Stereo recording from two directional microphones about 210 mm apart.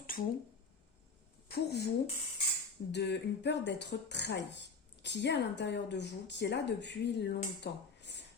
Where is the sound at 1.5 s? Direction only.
50° left (ahead or behind).